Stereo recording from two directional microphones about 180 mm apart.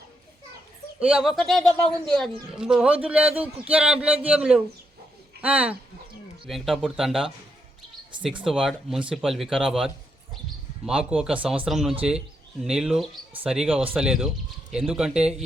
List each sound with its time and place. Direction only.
0.9 s speech: 5° right (ahead or behind)
8.4 s speech: centre (ahead or behind)